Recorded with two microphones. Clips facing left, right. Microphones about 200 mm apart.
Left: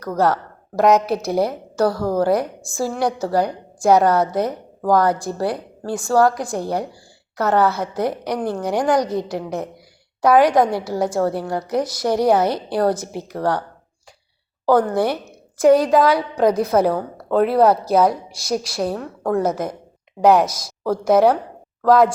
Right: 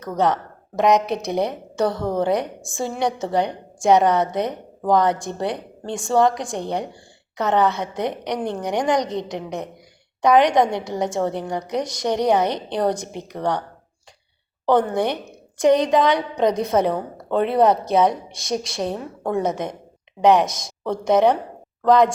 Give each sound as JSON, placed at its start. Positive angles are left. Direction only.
{"t": 0.0, "sound": "a woman's voice", "side_deg": 0}
{"t": 9.0, "sound": "a woman's voice", "side_deg": -20}
{"t": 9.3, "sound": "a woman's voice", "side_deg": 5}
{"t": 14.7, "sound": "a woman's voice", "side_deg": 0}